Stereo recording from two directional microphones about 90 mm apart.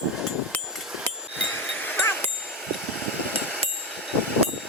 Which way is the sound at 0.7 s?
5° right (ahead or behind).